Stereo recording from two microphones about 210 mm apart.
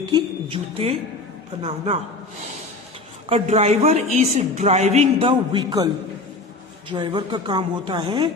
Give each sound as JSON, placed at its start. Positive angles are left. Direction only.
{"t": 0.0, "sound": "a woman's voice", "side_deg": -25}
{"t": 3.2, "sound": "a man's voice", "side_deg": -30}
{"t": 6.9, "sound": "a woman's voice", "side_deg": -20}